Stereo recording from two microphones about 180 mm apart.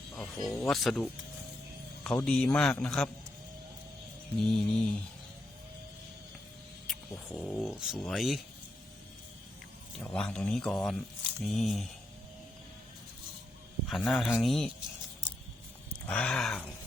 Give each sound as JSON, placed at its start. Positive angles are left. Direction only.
{"t": 0.4, "sound": "speech", "side_deg": 15}
{"t": 0.7, "sound": "speech", "side_deg": 0}
{"t": 4.4, "sound": "speech", "side_deg": 5}
{"t": 6.8, "sound": "speech", "side_deg": 0}
{"t": 10.0, "sound": "speech", "side_deg": 5}
{"t": 13.8, "sound": "speech", "side_deg": 0}
{"t": 16.0, "sound": "speech", "side_deg": 5}